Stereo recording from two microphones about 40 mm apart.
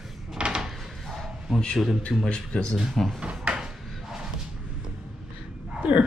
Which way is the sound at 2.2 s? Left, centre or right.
Left.